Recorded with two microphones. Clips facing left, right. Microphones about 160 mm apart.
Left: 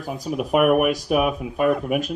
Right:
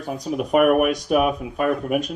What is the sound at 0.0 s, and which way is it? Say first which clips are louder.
Speech: right 1 dB; centre (ahead or behind).